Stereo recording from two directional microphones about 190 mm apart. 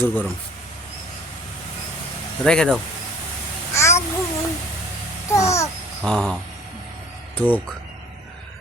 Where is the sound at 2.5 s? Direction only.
5° left (ahead or behind).